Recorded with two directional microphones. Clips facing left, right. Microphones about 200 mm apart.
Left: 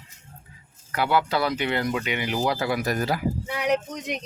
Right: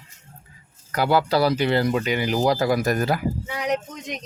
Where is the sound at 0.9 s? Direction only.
40° right (ahead or behind).